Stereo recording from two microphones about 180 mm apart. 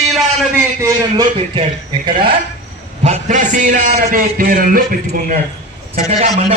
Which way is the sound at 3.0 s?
40° right (ahead or behind).